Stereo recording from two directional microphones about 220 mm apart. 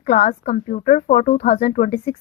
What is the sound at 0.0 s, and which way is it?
Speech, 35° left (ahead or behind).